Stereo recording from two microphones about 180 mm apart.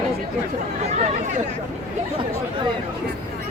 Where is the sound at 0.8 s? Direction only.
40° right (ahead or behind).